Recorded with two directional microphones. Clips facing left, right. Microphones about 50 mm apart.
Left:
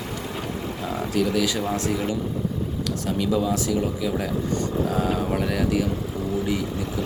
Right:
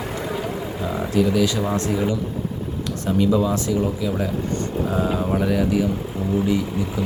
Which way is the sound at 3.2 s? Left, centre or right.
Centre.